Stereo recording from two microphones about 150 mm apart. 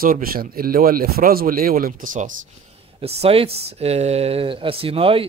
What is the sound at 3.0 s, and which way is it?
Speech, 40° right (ahead or behind).